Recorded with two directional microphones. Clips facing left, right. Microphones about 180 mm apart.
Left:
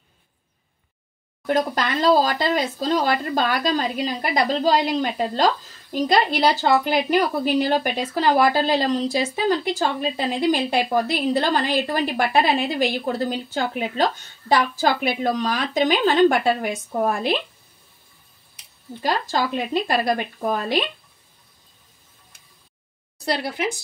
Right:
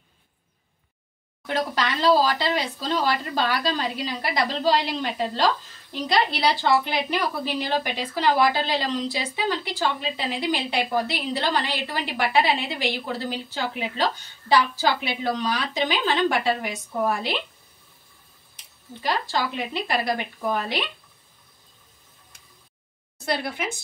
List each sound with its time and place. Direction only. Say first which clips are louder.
1.4 s a woman's voice: left 4 dB; 45° left (ahead or behind)
19.0 s a woman's voice: left 3 dB; 45° left (ahead or behind)